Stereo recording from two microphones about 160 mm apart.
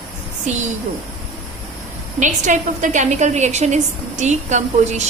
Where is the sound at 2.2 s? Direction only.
50° right (ahead or behind).